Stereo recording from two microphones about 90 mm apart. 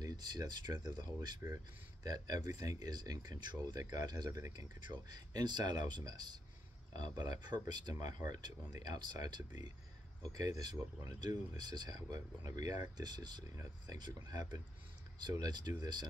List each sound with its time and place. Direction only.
0.0 s speech: 50° right (ahead or behind)
4.7 s speech: 55° right (ahead or behind)